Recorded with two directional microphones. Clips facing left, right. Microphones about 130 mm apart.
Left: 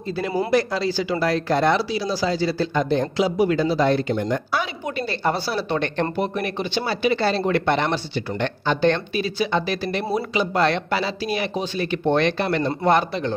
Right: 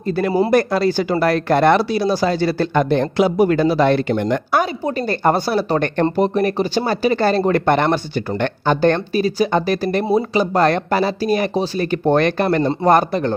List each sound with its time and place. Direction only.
0.5 s speech: 55° right (ahead or behind)
4.8 s speech: 45° right (ahead or behind)
6.1 s speech: 40° right (ahead or behind)